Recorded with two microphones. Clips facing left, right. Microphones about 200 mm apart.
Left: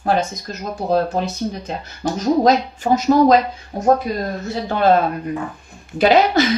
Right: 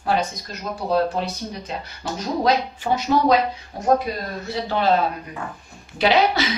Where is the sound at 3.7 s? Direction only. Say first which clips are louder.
Left 4 dB; 50° left (ahead or behind).